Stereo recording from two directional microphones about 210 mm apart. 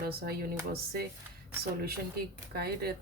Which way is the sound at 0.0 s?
50° right (ahead or behind).